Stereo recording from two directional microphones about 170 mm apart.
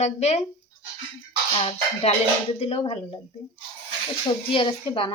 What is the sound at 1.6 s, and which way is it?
Speech, 35° left (ahead or behind).